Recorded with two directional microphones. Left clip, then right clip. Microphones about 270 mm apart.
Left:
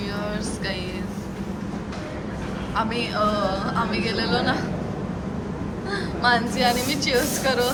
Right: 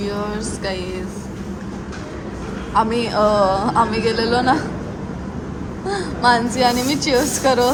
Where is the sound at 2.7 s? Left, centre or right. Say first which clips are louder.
Right 7 dB; right.